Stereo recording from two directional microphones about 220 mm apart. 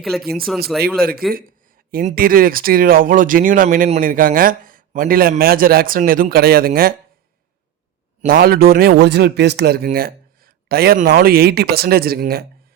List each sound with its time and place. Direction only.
0.0 s speech: centre (ahead or behind)
0.9 s speech: 40° right (ahead or behind)
8.2 s speech: 40° right (ahead or behind)